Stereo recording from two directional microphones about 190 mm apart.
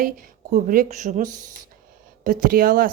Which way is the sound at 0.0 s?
45° right (ahead or behind).